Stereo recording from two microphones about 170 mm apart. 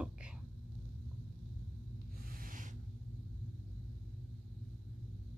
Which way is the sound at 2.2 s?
55° right (ahead or behind).